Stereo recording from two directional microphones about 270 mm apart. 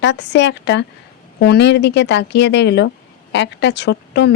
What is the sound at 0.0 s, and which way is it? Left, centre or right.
A woman's voice, left.